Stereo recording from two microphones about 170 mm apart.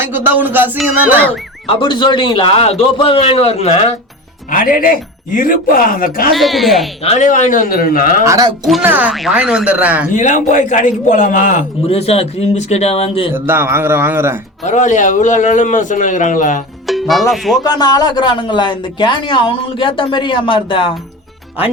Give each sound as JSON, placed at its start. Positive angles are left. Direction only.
{"t": 0.1, "sound": "speech", "side_deg": -10}
{"t": 1.6, "sound": "a man's voice", "side_deg": 30}
{"t": 4.5, "sound": "speech", "side_deg": 55}
{"t": 6.3, "sound": "speech", "side_deg": 0}
{"t": 7.0, "sound": "a man's voice", "side_deg": 35}
{"t": 7.3, "sound": "speech", "side_deg": 50}
{"t": 8.2, "sound": "speech", "side_deg": -20}
{"t": 8.8, "sound": "speech", "side_deg": -10}
{"t": 10.2, "sound": "a man's voice", "side_deg": 45}
{"t": 13.3, "sound": "speech", "side_deg": -15}
{"t": 14.6, "sound": "a man's voice", "side_deg": 45}
{"t": 16.8, "sound": "music", "side_deg": 0}
{"t": 17.6, "sound": "speech", "side_deg": 25}